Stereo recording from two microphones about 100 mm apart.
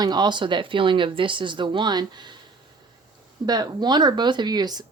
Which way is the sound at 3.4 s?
45° right (ahead or behind).